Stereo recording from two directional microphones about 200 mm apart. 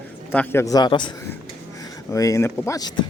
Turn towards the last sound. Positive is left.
turn(degrees=20)  # may be behind; listen again after turning